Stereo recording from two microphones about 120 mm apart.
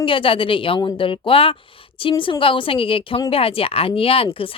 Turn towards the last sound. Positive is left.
turn(degrees=50)  # may be behind; listen again after turning